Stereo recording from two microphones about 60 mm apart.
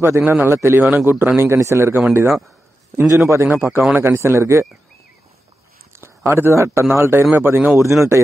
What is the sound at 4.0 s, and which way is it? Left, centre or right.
Speech, right.